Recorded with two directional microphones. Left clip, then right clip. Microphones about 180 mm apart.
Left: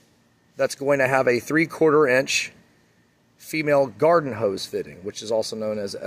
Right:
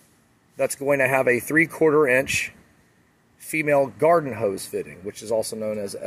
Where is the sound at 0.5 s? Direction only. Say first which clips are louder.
Left 1 dB; 15° left (ahead or behind).